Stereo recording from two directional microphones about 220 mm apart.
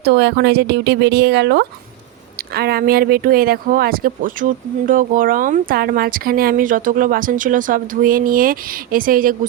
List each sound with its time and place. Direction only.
0.0 s speech: 45° right (ahead or behind)